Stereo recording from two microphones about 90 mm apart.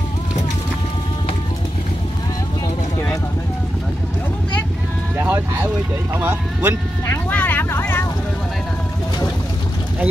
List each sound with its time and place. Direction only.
5.2 s vehicle: 20° right (ahead or behind)
6.1 s a sound: 20° right (ahead or behind)
7.2 s vehicle: 20° left (ahead or behind)